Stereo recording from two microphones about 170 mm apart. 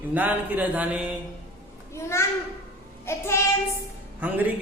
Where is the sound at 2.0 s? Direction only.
15° left (ahead or behind).